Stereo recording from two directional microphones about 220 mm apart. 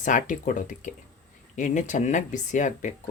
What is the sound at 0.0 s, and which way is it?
Speech, 35° left (ahead or behind).